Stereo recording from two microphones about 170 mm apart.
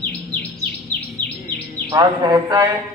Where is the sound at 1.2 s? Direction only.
45° left (ahead or behind).